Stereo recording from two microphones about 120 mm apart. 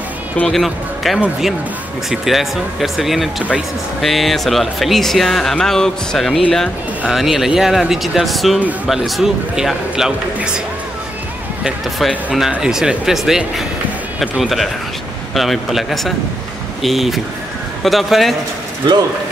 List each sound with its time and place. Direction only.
0.4 s speech: centre (ahead or behind)
12.3 s speech: 5° right (ahead or behind)